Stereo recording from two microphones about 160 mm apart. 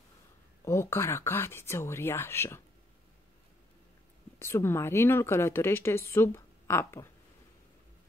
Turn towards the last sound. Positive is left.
turn(degrees=15)  # may be behind; listen again after turning